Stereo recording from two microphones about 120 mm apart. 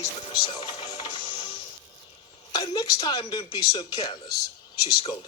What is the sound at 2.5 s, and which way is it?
Speech, 35° left (ahead or behind).